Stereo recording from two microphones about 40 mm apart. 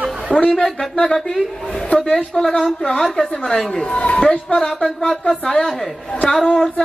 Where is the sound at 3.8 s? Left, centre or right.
Left.